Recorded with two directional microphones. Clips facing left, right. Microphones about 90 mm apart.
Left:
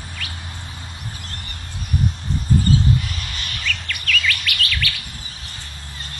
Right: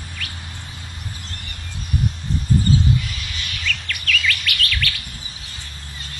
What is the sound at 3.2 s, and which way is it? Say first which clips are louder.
Bird: left 1 dB; 40° left (ahead or behind).